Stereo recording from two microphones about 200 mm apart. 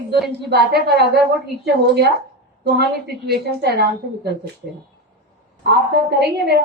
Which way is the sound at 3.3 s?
55° right (ahead or behind).